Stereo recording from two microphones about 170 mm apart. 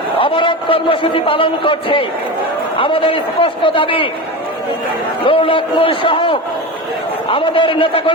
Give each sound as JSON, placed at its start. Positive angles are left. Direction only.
{"t": 0.2, "sound": "a man's voice", "side_deg": 30}
{"t": 5.2, "sound": "a man's voice", "side_deg": 30}